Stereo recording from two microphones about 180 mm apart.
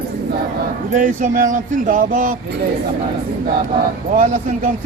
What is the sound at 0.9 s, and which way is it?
Speech, 45° right (ahead or behind).